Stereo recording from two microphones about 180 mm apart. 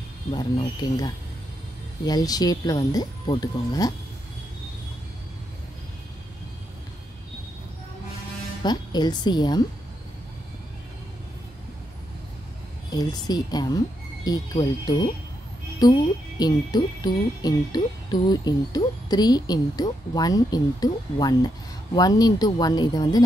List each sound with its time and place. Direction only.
0.3 s speech: 25° left (ahead or behind)
8.6 s speech: 25° left (ahead or behind)
12.9 s speech: 20° left (ahead or behind)